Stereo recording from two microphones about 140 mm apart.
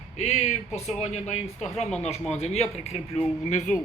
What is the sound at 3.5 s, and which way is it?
Speech, 60° left (ahead or behind).